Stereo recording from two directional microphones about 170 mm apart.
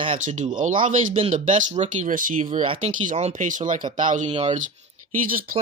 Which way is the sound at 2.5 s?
35° right (ahead or behind).